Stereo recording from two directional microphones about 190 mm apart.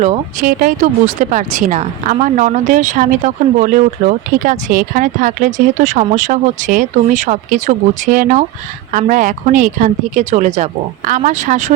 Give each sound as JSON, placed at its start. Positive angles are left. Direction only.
{"t": 0.0, "sound": "speech", "side_deg": -40}